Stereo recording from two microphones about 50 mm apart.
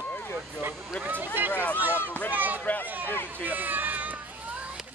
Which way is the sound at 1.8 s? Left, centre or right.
Right.